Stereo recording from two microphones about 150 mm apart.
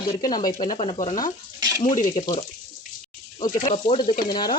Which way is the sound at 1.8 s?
60° left (ahead or behind).